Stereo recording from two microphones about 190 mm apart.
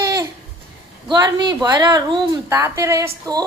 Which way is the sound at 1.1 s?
25° right (ahead or behind).